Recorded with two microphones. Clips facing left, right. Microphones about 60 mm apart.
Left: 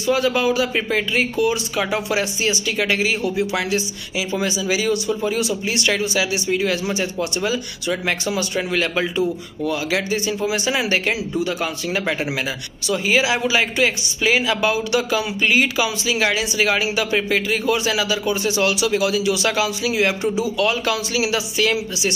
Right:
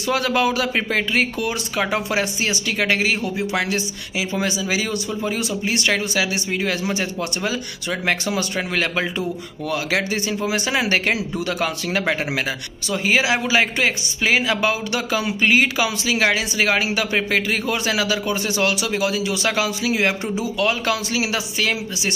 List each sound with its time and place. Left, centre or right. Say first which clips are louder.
0.0 s speech: left 1 dB; right
11.3 s speech: left 1 dB; right
12.9 s speech: even; right